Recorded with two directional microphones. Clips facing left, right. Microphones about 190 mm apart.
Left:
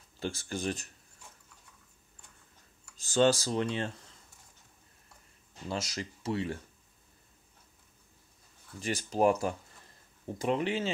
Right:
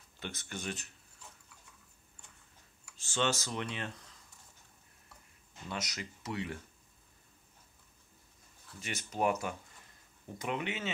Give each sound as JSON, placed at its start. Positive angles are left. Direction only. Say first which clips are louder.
{"t": 0.2, "sound": "speech", "louder": "left 8 dB", "side_deg": 35}
{"t": 3.0, "sound": "speech", "louder": "left 8 dB", "side_deg": 35}
{"t": 5.5, "sound": "speech", "louder": "left 5 dB", "side_deg": 30}
{"t": 8.8, "sound": "speech", "louder": "left 6 dB", "side_deg": 35}